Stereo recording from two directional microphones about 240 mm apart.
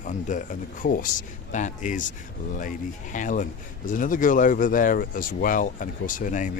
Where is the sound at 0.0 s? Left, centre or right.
Left.